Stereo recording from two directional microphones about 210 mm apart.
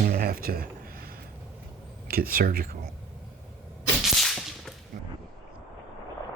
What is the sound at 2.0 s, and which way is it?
Speech, 45° right (ahead or behind).